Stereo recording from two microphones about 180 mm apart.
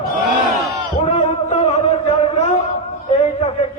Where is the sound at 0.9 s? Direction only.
35° left (ahead or behind).